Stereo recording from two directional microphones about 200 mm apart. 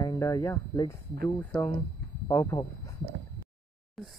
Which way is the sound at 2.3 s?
15° left (ahead or behind).